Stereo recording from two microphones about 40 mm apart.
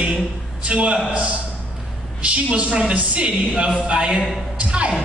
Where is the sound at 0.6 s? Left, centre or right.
Right.